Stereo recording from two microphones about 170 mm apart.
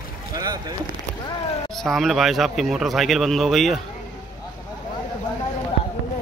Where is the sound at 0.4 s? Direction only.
20° right (ahead or behind).